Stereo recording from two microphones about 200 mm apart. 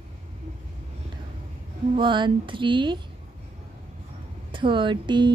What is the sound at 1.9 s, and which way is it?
A woman's voice, 25° right (ahead or behind).